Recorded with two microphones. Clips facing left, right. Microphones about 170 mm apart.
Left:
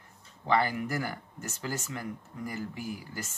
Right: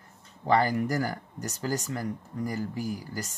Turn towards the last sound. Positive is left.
turn(degrees=-40)  # may be behind; listen again after turning